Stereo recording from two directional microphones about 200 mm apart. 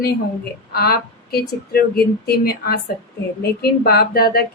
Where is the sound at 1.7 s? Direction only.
50° left (ahead or behind).